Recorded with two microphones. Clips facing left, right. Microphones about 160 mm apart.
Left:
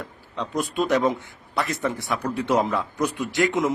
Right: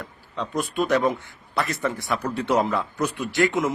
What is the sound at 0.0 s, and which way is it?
A man's voice, 20° left (ahead or behind).